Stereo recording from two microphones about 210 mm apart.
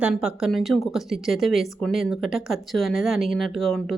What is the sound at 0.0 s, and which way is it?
Speech, 5° right (ahead or behind).